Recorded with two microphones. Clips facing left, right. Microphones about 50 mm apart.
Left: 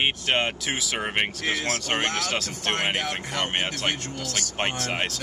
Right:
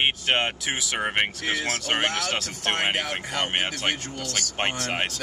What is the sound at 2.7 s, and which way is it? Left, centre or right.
Speech, centre.